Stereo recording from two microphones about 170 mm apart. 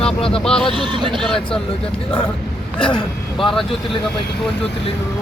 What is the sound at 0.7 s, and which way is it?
Speech, 25° right (ahead or behind).